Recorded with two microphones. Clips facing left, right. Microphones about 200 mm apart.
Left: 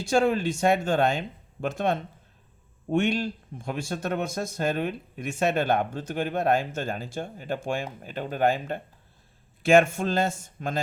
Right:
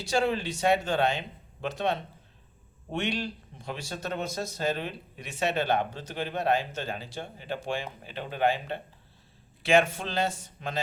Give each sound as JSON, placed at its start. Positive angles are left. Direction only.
{"t": 0.0, "sound": "speech", "side_deg": 50}